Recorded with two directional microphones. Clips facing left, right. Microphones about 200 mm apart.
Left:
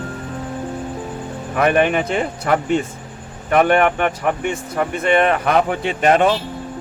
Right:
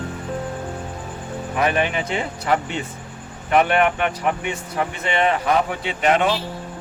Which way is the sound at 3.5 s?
50° left (ahead or behind).